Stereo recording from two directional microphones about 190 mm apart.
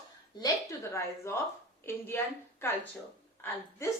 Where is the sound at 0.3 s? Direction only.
20° left (ahead or behind).